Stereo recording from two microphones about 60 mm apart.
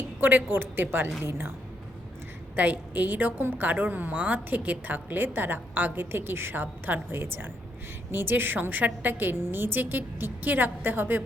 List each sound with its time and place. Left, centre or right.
0.2 s a woman's voice: right
2.6 s a woman's voice: right